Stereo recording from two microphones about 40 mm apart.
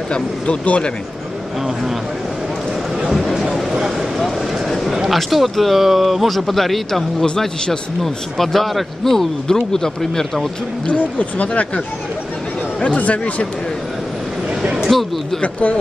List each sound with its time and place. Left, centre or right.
0.5 s speech: left
3.1 s a sound: centre
4.2 s vehicle: centre
5.1 s speech: centre
7.2 s a man's voice: left
8.0 s speech: centre
10.9 s speech: left
12.8 s speech: left
14.6 s speech: right
15.4 s speech: left